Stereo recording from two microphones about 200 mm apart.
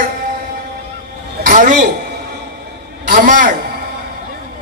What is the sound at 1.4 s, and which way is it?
Speech, 40° right (ahead or behind).